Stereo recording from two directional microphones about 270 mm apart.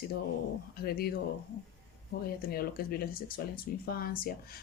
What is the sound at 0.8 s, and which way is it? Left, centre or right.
Speech, left.